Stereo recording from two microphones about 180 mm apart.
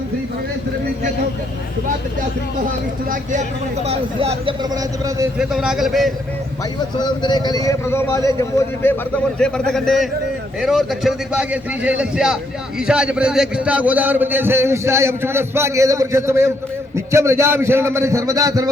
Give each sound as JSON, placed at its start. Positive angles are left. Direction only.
{"t": 3.8, "sound": "speech", "side_deg": -35}
{"t": 4.7, "sound": "a man's voice", "side_deg": -20}
{"t": 5.4, "sound": "a man's voice", "side_deg": -5}
{"t": 6.9, "sound": "a man's voice", "side_deg": 25}
{"t": 9.4, "sound": "a man's voice", "side_deg": 5}